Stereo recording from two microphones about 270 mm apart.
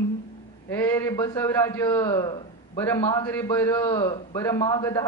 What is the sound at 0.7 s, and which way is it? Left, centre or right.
A man's voice, centre.